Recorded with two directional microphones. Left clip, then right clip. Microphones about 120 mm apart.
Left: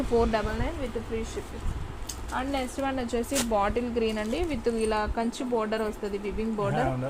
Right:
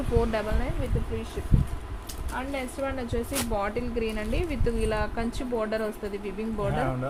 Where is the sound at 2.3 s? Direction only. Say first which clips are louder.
Left 2 dB; 90° left.